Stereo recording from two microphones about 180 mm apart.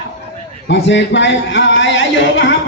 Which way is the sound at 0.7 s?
80° left.